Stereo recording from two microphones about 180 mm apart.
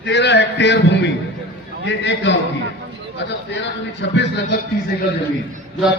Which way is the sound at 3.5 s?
80° left.